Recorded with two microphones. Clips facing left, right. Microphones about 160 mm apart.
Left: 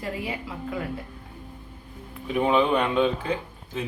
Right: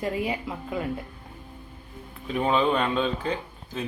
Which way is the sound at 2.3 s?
15° left (ahead or behind).